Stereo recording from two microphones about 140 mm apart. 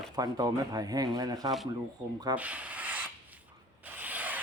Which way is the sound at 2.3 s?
10° right (ahead or behind).